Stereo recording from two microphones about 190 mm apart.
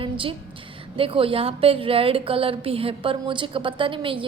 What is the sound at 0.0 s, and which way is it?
A woman's voice, 30° right (ahead or behind).